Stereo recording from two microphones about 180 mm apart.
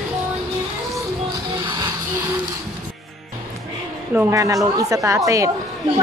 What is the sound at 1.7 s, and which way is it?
Music, 20° right (ahead or behind).